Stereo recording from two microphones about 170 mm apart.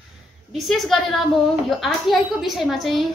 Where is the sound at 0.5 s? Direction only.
Centre (ahead or behind).